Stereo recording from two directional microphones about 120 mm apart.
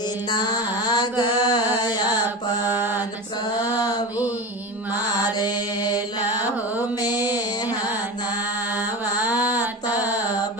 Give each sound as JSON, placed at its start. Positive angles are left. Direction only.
{"t": 0.3, "sound": "mantra", "side_deg": 35}
{"t": 1.4, "sound": "music", "side_deg": 35}
{"t": 1.8, "sound": "carnatic music", "side_deg": 35}
{"t": 3.6, "sound": "a sound", "side_deg": 35}
{"t": 5.1, "sound": "mantra", "side_deg": 35}
{"t": 9.3, "sound": "a sound", "side_deg": -15}